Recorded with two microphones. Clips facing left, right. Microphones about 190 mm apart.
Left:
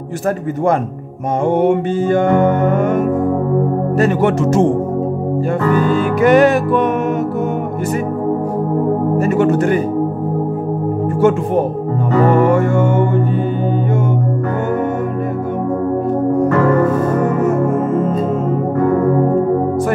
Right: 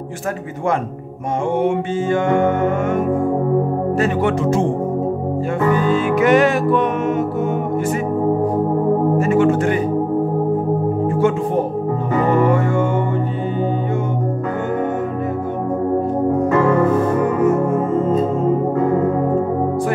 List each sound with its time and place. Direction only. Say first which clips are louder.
2.0 s music: left 3 dB; 35° left (ahead or behind)
4.0 s speech: left 5 dB; 45° left (ahead or behind)
5.9 s music: left 4 dB; 40° left (ahead or behind)
9.2 s music: left 1 dB; 40° left (ahead or behind)
12.3 s speech: left 2 dB; 45° left (ahead or behind)